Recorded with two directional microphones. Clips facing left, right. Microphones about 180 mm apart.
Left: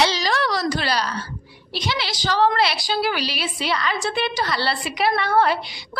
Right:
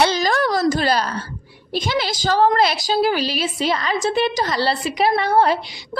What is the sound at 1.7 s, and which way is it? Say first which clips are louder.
A woman's voice: right 5 dB; 45° right (ahead or behind).